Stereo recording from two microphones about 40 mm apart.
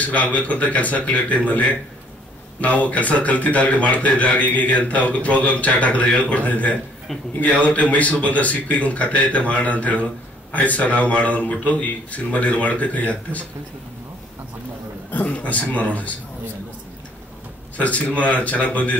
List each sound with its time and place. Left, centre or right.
0.0 s a man's voice: left
7.9 s a man's voice: left
15.0 s a man's voice: left
17.7 s a man's voice: left